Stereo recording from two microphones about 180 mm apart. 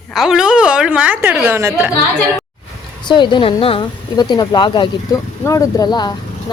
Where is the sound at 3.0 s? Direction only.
25° left (ahead or behind).